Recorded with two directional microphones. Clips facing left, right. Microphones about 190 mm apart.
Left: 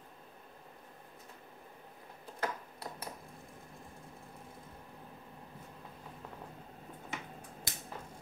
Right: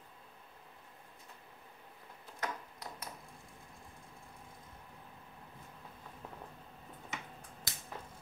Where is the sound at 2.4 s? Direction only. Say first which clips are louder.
Left 3 dB; 30° left (ahead or behind).